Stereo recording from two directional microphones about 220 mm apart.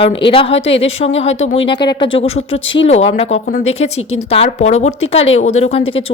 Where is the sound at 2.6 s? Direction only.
60° left (ahead or behind).